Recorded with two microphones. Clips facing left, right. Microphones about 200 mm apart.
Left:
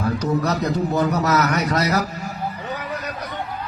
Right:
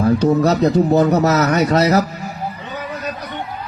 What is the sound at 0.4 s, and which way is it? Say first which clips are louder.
Speech: right 7 dB; 30° right (ahead or behind).